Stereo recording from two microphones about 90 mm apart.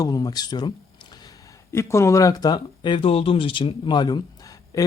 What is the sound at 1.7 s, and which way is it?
Speech, 30° left (ahead or behind).